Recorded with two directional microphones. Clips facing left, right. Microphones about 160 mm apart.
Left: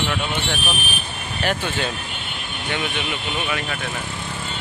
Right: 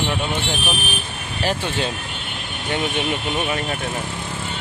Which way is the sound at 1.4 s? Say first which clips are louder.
Right 1 dB; 35° right (ahead or behind).